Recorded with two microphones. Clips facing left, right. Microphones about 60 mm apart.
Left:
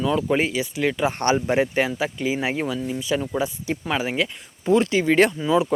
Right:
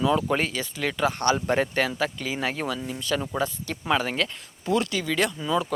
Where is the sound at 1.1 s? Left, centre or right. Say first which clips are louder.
Left 2 dB; left.